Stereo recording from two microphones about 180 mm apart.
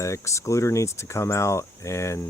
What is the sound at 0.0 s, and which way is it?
Speech, 15° left (ahead or behind).